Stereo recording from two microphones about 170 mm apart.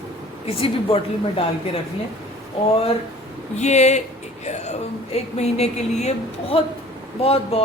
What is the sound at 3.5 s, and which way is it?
A woman's voice, 40° left (ahead or behind).